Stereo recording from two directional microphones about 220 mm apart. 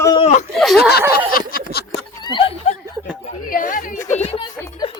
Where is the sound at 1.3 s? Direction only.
45° left (ahead or behind).